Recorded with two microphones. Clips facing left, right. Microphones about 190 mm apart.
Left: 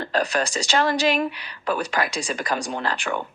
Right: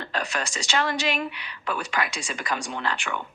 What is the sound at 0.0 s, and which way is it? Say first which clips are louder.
Speech: left 7 dB; 35° left (ahead or behind).